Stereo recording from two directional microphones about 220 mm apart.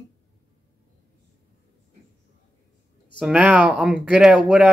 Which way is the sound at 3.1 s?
5° right (ahead or behind).